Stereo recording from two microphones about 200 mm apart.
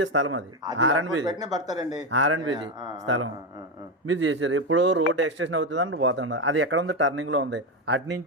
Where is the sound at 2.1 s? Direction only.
80° right.